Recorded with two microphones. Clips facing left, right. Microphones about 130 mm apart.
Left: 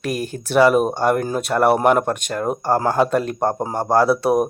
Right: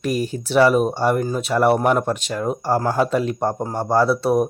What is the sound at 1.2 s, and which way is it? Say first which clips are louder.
Speech: even; 55° left (ahead or behind).